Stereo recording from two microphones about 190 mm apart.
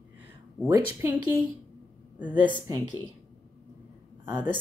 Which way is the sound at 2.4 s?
10° right (ahead or behind).